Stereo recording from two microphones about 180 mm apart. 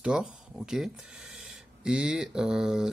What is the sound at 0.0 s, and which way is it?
Speech, 5° right (ahead or behind).